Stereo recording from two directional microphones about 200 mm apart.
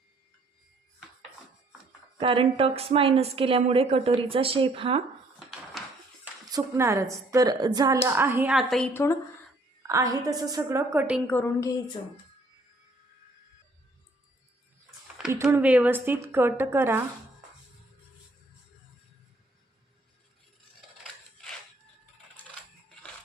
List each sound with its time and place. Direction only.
2.1 s a woman's voice: 25° right (ahead or behind)
5.8 s a sound: centre (ahead or behind)
6.5 s a woman's voice: 15° right (ahead or behind)
9.8 s a woman's voice: 15° right (ahead or behind)
11.3 s a woman's voice: 10° left (ahead or behind)
15.3 s a woman's voice: 15° right (ahead or behind)